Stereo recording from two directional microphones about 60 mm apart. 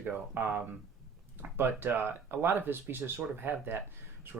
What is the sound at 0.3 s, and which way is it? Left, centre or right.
Speech, right.